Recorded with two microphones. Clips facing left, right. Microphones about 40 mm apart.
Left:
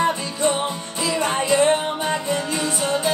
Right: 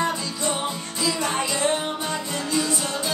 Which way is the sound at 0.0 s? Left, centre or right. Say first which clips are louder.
Left 5 dB; left.